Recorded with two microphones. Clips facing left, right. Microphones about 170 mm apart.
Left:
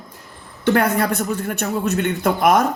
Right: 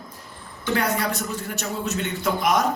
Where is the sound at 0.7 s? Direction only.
55° left (ahead or behind).